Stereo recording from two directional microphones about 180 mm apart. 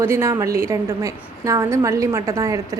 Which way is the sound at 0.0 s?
15° right (ahead or behind).